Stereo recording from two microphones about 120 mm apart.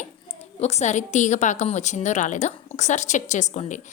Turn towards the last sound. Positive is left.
turn(degrees=80)